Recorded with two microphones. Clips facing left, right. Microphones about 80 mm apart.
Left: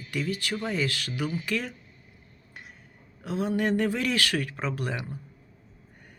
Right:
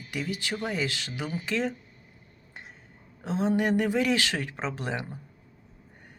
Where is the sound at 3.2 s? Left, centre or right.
Right.